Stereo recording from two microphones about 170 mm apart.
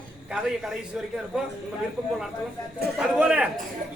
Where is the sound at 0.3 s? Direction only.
5° right (ahead or behind).